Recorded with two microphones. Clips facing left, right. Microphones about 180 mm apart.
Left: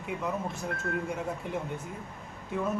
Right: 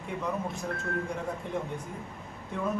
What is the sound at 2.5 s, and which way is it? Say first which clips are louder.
Speech: left 2 dB; 5° left (ahead or behind).